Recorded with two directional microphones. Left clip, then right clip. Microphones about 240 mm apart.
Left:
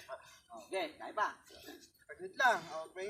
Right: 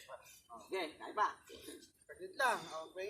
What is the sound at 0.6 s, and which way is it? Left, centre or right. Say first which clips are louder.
Speech: left 2 dB; left.